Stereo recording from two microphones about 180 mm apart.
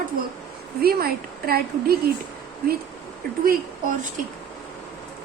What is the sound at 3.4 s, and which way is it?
Speech, 50° right (ahead or behind).